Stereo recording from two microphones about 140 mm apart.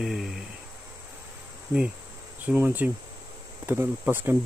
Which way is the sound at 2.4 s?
10° right (ahead or behind).